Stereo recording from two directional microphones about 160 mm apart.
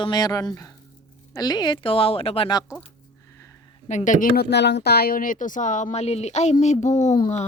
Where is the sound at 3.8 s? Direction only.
50° left (ahead or behind).